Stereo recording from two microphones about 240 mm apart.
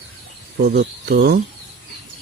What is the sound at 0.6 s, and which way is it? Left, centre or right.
Speech, right.